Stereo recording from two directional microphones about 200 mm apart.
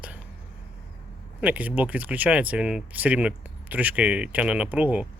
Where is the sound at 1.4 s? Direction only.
5° right (ahead or behind).